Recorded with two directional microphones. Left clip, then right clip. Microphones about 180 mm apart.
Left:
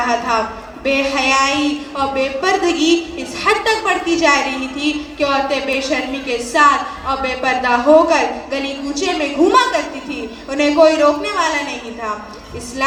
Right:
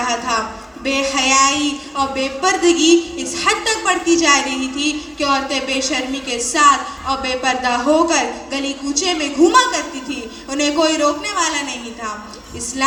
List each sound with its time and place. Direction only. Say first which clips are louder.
0.0 s a woman's voice: left 3 dB; 30° left (ahead or behind)